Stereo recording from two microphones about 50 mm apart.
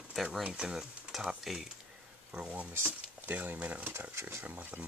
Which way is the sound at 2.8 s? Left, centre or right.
Right.